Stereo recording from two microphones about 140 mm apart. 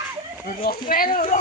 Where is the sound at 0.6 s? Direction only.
90° left.